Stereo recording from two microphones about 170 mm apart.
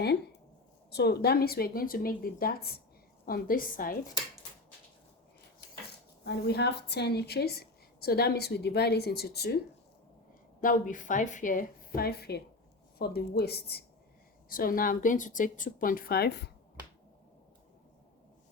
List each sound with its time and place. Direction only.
0.9 s speech: 75° left (ahead or behind); by 3.9 s 55° left (ahead or behind)
6.2 s a woman's voice: 75° left (ahead or behind)
10.6 s a woman's voice: 50° left (ahead or behind)
11.9 s a woman's voice: 65° left (ahead or behind)
14.5 s speech: 55° left (ahead or behind); by 16.5 s 70° left (ahead or behind)